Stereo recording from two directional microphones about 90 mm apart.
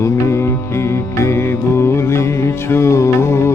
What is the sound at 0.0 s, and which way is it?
Music, 30° left (ahead or behind).